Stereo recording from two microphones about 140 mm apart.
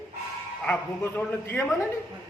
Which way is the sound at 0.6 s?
10° left (ahead or behind).